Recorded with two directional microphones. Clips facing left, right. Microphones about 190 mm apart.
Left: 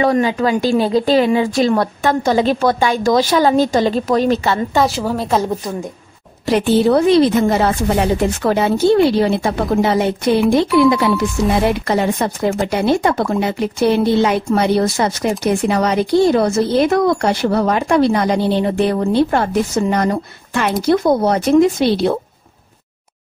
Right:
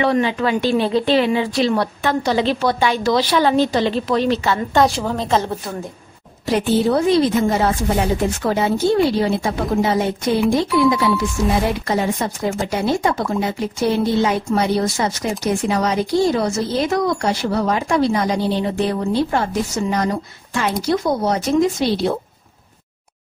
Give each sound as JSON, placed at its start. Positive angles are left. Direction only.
{"t": 0.0, "sound": "speech", "side_deg": 40}
{"t": 4.7, "sound": "a woman's voice", "side_deg": 5}
{"t": 6.4, "sound": "speech", "side_deg": 70}